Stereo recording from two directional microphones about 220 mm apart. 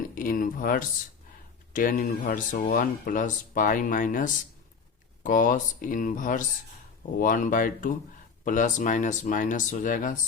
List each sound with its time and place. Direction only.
0.1 s speech: 40° left (ahead or behind)